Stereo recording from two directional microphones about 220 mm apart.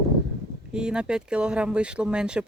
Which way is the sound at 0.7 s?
5° right (ahead or behind).